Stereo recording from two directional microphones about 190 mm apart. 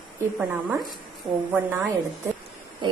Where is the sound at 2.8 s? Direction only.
25° right (ahead or behind).